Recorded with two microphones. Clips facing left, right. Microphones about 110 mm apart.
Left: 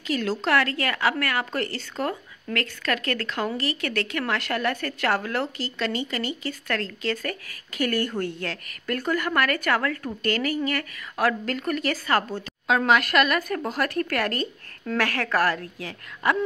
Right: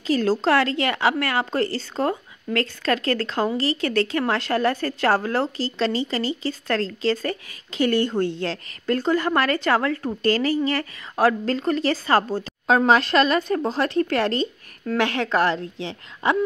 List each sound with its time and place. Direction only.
0.0 s a woman's voice: 35° right (ahead or behind)